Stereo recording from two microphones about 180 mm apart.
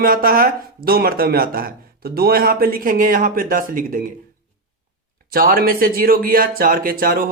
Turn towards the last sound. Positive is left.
turn(degrees=-55)  # may be behind; listen again after turning